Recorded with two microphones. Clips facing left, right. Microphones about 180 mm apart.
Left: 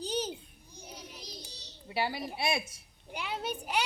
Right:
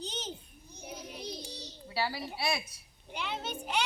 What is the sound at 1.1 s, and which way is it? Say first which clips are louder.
Child singing: right 7 dB; 60° right (ahead or behind).